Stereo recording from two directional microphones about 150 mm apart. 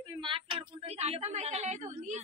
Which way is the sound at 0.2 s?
35° right (ahead or behind).